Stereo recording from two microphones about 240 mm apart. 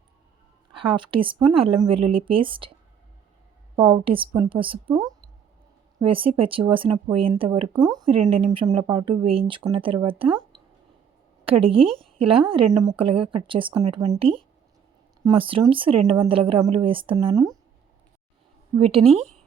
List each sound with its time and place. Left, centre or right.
0.7 s a sound: right
1.1 s speech: right
3.8 s a woman's voice: right
11.6 s speech: right
11.9 s a sound: right
12.2 s speech: right
18.8 s speech: right